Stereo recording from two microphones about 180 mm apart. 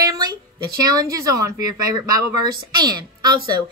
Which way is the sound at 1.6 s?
20° right (ahead or behind).